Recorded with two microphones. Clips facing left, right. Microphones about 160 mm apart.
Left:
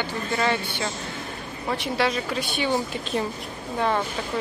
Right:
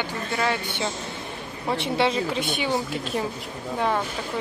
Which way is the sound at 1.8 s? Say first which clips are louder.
Right 2 dB; 25° right (ahead or behind).